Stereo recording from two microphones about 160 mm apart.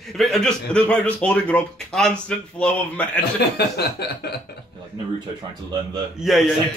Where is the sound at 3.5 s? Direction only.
90° left.